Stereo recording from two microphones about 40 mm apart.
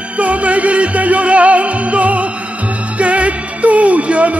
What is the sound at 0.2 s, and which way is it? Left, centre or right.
Music, right.